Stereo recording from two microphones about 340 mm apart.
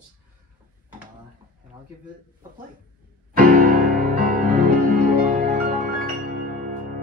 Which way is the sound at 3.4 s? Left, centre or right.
Right.